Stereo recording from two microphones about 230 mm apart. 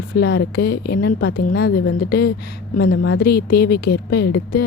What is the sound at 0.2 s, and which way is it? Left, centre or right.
A woman's voice, left.